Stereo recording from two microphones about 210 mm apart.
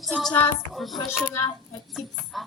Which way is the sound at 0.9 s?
15° left (ahead or behind).